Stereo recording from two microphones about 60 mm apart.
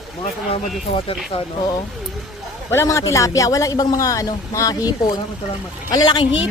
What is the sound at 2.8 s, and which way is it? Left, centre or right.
A man's voice, left.